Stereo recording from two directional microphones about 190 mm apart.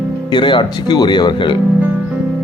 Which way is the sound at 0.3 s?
25° left (ahead or behind).